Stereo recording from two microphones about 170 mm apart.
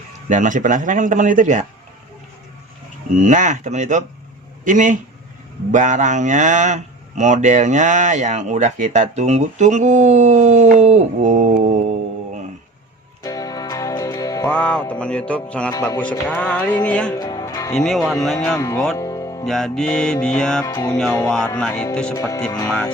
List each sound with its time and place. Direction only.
0.3 s speech: 50° right (ahead or behind)
3.2 s speech: 45° right (ahead or behind)
13.2 s music: 20° left (ahead or behind)
14.4 s music: 5° left (ahead or behind)
17.2 s music: 20° left (ahead or behind)
17.7 s music: 5° left (ahead or behind)
18.9 s music: 20° left (ahead or behind)
19.5 s music: centre (ahead or behind)
20.7 s music: 20° left (ahead or behind)
20.9 s music: 5° left (ahead or behind)
22.1 s music: 15° left (ahead or behind)